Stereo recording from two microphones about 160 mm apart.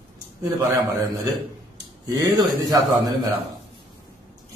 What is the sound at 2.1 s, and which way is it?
A man's voice, 20° right (ahead or behind).